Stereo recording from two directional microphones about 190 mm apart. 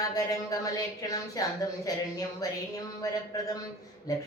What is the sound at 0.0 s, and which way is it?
Speech, 20° left (ahead or behind).